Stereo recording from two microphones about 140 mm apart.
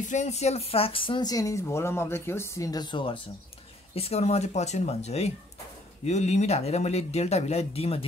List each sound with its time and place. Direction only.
0.1 s speech: 55° left (ahead or behind); by 3.2 s 35° left (ahead or behind)
3.9 s speech: 45° left (ahead or behind)